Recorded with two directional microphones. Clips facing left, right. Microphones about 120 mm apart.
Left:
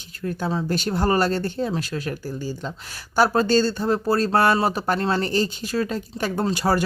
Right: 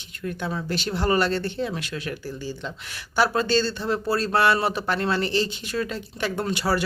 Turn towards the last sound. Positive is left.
turn(degrees=40)  # may be behind; listen again after turning